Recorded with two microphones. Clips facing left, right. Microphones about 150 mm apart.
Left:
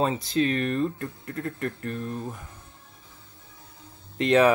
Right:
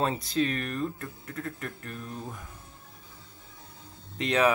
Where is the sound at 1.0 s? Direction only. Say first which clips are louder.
Left 5 dB; 45° left (ahead or behind).